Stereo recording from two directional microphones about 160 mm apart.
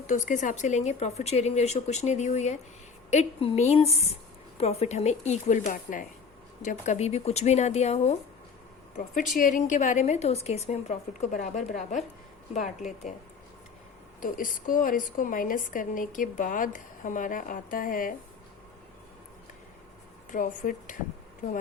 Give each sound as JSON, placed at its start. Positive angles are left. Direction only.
{"t": 0.1, "sound": "a woman's voice", "side_deg": 50}
{"t": 9.4, "sound": "a woman's voice", "side_deg": 55}
{"t": 14.2, "sound": "a woman's voice", "side_deg": 60}
{"t": 20.3, "sound": "a woman's voice", "side_deg": 55}